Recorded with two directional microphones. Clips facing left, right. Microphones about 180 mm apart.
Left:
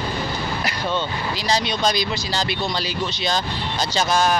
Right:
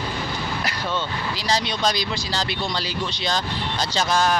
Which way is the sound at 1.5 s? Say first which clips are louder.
Left 2 dB; 15° left (ahead or behind).